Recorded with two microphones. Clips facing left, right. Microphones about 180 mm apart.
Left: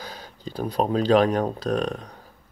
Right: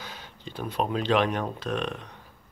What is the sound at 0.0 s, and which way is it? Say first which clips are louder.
Speech: left 5 dB; 40° left (ahead or behind).